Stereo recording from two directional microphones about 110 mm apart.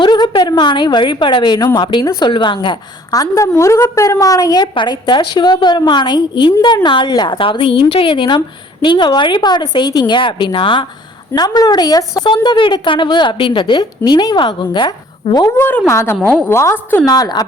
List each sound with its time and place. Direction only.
0.0 s a woman's voice: 45° left (ahead or behind)
11.3 s a woman's voice: 35° left (ahead or behind)
12.3 s a woman's voice: 45° left (ahead or behind)
15.5 s a woman's voice: 20° left (ahead or behind)
17.1 s a woman's voice: 35° left (ahead or behind)